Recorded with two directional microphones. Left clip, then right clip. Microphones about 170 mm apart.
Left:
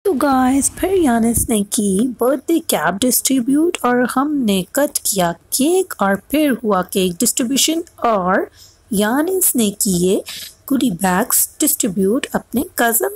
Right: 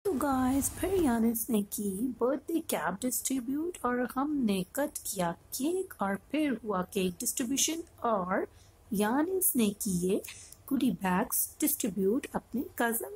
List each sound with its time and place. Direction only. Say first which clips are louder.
0.0 s speech: left 15 dB; 30° left (ahead or behind)